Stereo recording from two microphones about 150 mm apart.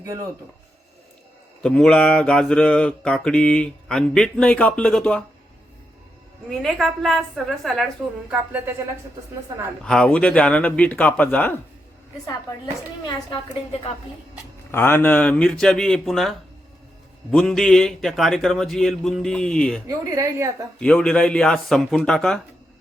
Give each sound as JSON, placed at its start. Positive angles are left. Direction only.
{"t": 1.6, "sound": "mantra", "side_deg": 5}
{"t": 6.5, "sound": "mantra", "side_deg": 0}
{"t": 8.3, "sound": "speech", "side_deg": -10}
{"t": 9.8, "sound": "speech", "side_deg": 5}
{"t": 14.7, "sound": "mantra", "side_deg": 15}
{"t": 17.3, "sound": "mantra", "side_deg": 5}
{"t": 20.1, "sound": "a woman's voice", "side_deg": -20}
{"t": 20.7, "sound": "mantra", "side_deg": 5}